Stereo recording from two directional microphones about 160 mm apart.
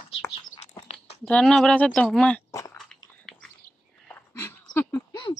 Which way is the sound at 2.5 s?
20° left (ahead or behind).